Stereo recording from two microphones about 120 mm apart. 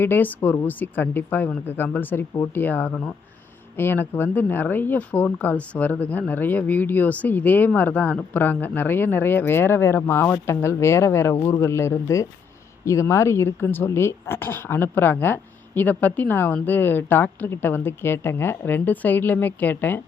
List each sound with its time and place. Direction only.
0.0 s speech: 15° left (ahead or behind)